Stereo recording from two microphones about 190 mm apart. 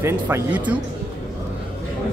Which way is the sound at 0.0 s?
10° right (ahead or behind).